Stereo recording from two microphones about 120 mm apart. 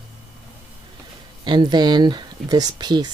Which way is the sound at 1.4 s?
40° right (ahead or behind).